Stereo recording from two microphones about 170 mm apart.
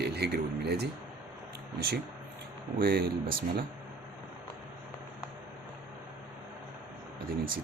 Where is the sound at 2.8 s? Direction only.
65° right (ahead or behind).